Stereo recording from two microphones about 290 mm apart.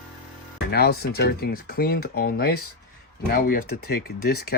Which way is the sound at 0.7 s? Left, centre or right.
Left.